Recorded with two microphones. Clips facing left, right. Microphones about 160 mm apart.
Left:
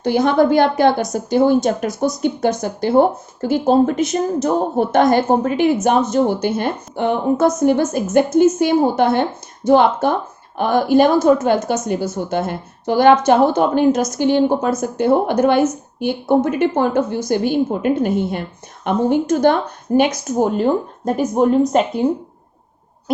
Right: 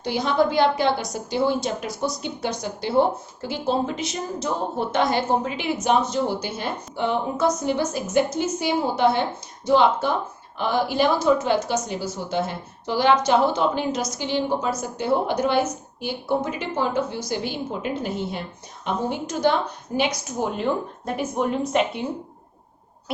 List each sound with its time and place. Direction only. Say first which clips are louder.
0.0 s a woman's voice: left 7 dB; 50° left (ahead or behind)